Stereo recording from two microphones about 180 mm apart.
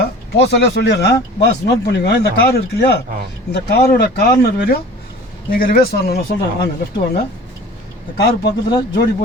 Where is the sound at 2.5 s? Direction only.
60° left (ahead or behind).